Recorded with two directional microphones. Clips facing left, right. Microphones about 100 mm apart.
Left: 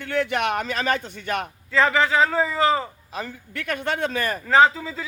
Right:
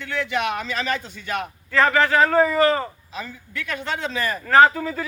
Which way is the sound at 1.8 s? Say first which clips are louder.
Right 2 dB; 5° left (ahead or behind).